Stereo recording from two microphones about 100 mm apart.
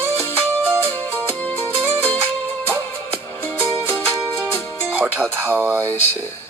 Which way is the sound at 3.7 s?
60° right (ahead or behind).